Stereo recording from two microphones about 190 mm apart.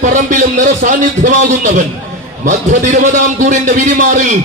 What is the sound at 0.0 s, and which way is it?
A man's voice, 40° right (ahead or behind).